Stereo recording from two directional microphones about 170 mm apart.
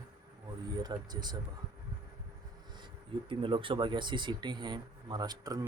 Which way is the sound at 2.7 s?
30° right (ahead or behind).